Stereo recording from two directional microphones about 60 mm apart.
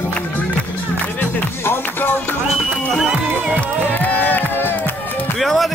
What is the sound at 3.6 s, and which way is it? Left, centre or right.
Music, left.